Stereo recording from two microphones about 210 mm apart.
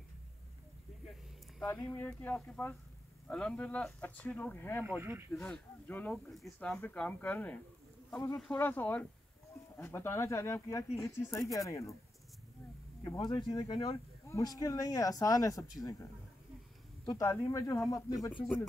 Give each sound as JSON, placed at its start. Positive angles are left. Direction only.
{"t": 1.6, "sound": "speech", "side_deg": 10}
{"t": 4.8, "sound": "speech", "side_deg": -10}
{"t": 5.3, "sound": "speech", "side_deg": 5}
{"t": 13.0, "sound": "speech", "side_deg": 20}